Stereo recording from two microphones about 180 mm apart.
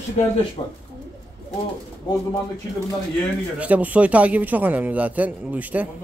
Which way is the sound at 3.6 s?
10° right (ahead or behind).